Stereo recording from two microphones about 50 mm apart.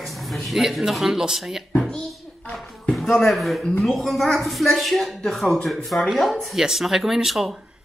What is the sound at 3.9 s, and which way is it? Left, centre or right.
Speech, centre.